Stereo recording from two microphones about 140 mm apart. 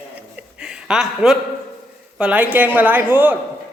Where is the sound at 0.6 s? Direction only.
5° right (ahead or behind).